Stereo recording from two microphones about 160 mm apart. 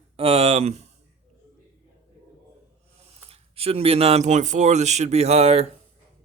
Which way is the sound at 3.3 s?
35° right (ahead or behind).